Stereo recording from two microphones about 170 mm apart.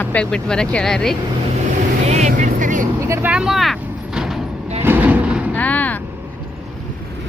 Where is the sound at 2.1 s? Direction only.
45° right (ahead or behind).